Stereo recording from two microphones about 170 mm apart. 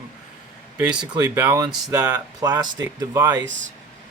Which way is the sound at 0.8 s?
5° right (ahead or behind).